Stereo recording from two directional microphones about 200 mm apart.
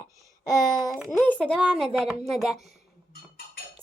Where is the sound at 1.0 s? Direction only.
Centre (ahead or behind).